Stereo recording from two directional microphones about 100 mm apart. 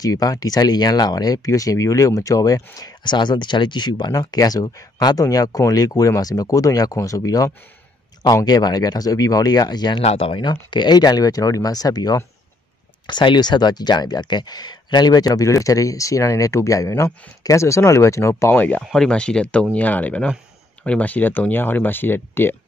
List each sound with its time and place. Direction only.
0.0 s speech: 35° left (ahead or behind)
10.0 s speech: 70° left (ahead or behind)
10.4 s speech: 50° left (ahead or behind); by 18.3 s 30° left (ahead or behind)
18.3 s speech: 20° left (ahead or behind)
18.9 s speech: 5° left (ahead or behind); by 22.6 s 20° left (ahead or behind)